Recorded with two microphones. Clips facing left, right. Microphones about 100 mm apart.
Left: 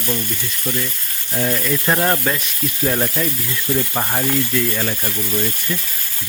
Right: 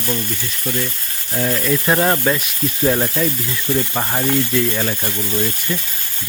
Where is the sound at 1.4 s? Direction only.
Centre (ahead or behind).